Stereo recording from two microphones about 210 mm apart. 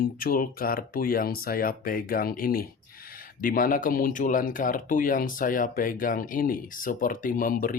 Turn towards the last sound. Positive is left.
turn(degrees=40)  # may be behind; listen again after turning